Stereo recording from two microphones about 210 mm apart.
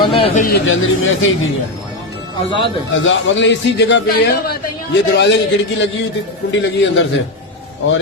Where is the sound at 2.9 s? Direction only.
65° left (ahead or behind).